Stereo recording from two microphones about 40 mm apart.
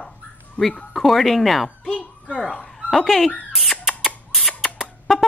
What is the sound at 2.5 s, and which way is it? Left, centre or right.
Dog, left.